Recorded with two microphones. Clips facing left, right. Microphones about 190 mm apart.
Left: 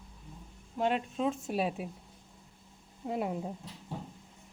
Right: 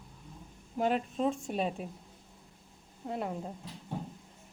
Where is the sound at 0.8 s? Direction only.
Centre (ahead or behind).